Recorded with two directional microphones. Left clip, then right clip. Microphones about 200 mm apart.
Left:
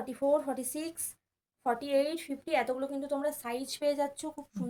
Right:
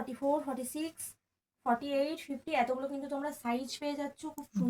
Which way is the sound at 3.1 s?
55° left (ahead or behind).